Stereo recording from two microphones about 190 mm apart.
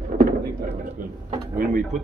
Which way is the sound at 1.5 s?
45° right (ahead or behind).